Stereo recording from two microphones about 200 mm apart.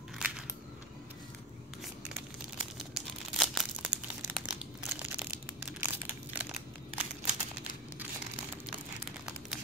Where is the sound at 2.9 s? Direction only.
Centre (ahead or behind).